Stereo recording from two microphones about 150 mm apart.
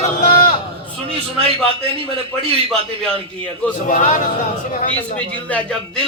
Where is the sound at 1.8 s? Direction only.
40° right (ahead or behind).